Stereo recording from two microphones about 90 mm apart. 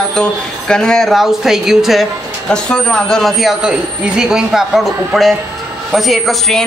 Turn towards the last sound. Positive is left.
turn(degrees=0)  # may be behind; listen again after turning